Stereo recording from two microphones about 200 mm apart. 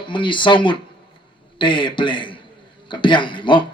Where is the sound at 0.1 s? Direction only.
25° left (ahead or behind).